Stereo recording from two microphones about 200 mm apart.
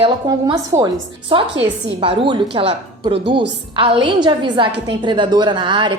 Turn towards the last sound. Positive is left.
turn(degrees=-25)  # may be behind; listen again after turning